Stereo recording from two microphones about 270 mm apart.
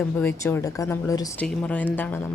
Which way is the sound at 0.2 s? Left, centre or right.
Centre.